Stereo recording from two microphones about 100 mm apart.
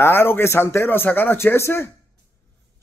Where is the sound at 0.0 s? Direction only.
25° left (ahead or behind).